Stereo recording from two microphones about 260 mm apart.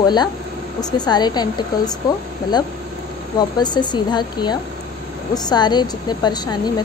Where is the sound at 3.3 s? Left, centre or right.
Centre.